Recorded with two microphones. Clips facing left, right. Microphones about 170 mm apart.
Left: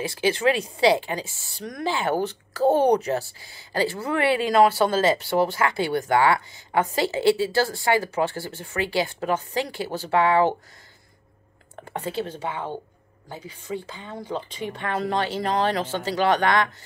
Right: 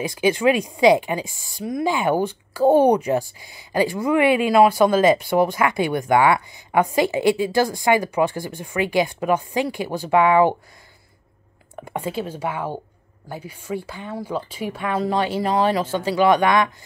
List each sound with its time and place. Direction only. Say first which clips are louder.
0.0 s a woman's voice: right 3 dB; 15° right (ahead or behind)
11.7 s a woman's voice: right 3 dB; 10° right (ahead or behind)